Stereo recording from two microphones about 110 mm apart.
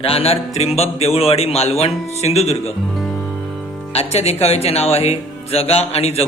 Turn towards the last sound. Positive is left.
turn(degrees=70)  # may be behind; listen again after turning